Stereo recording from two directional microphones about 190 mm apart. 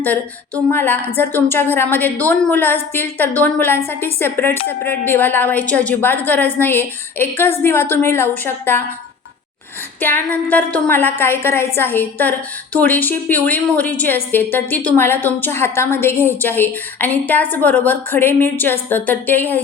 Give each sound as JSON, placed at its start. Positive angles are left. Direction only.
{"t": 0.0, "sound": "a woman's voice", "side_deg": 10}
{"t": 10.0, "sound": "a woman's voice", "side_deg": 10}